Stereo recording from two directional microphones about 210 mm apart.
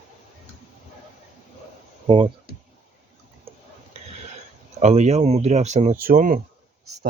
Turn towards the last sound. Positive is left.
turn(degrees=-40)  # may be behind; listen again after turning